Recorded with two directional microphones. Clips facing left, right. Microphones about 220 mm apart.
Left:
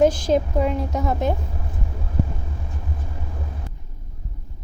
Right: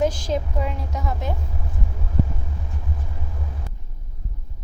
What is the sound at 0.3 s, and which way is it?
A woman's voice, 60° left (ahead or behind).